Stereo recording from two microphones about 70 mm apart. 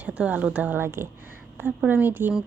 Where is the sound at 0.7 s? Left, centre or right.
Right.